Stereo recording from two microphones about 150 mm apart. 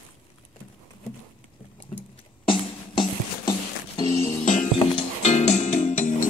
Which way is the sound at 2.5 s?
35° left (ahead or behind).